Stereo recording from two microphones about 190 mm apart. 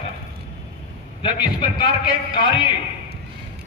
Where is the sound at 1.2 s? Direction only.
25° left (ahead or behind).